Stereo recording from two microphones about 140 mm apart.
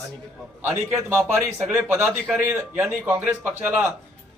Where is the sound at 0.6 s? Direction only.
15° right (ahead or behind).